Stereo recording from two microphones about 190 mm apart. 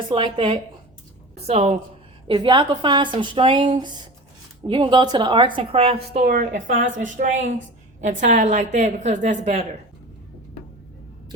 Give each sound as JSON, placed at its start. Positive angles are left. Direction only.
{"t": 0.1, "sound": "a woman's voice", "side_deg": -25}
{"t": 6.2, "sound": "a woman's voice", "side_deg": -45}